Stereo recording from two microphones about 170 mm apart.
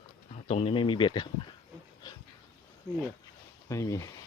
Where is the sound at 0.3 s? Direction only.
35° left (ahead or behind).